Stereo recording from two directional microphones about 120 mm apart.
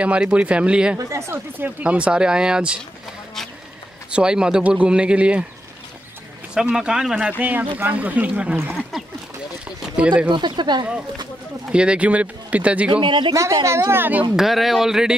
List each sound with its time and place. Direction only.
0.0 s speech: 10° right (ahead or behind)
0.9 s speech: 20° right (ahead or behind)
4.1 s speech: 5° right (ahead or behind)
6.5 s speech: 5° right (ahead or behind)
9.9 s speech: 10° right (ahead or behind)
10.3 s speech: 40° right (ahead or behind)
11.7 s speech: 10° right (ahead or behind)
12.9 s speech: 40° right (ahead or behind)
13.3 s a woman's voice: 30° right (ahead or behind)
14.3 s speech: centre (ahead or behind)